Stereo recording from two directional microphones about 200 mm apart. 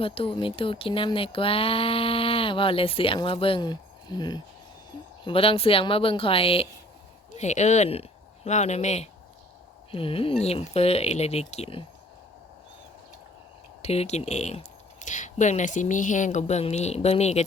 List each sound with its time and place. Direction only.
0.0 s speech: 25° left (ahead or behind)
13.8 s speech: 30° left (ahead or behind)